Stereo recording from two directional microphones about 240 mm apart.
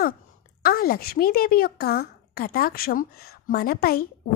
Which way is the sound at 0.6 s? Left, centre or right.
Left.